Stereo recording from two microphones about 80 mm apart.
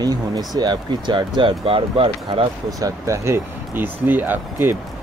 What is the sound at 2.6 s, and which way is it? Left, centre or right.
Speech, right.